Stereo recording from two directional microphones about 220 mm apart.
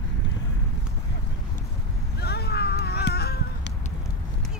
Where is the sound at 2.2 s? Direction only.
45° left (ahead or behind).